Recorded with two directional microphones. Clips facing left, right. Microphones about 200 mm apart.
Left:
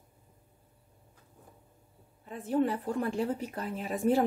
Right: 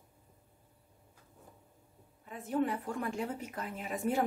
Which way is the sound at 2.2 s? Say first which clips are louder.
Left 4 dB; 30° left (ahead or behind).